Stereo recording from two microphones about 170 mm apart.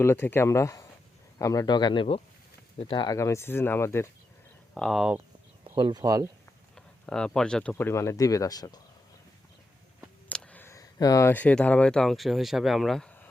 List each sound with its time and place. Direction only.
0.0 s speech: 15° left (ahead or behind)
4.7 s speech: centre (ahead or behind)
5.6 s speech: 30° right (ahead or behind)
6.7 s speech: 5° left (ahead or behind); by 8.8 s 20° left (ahead or behind)
10.2 s speech: 10° left (ahead or behind)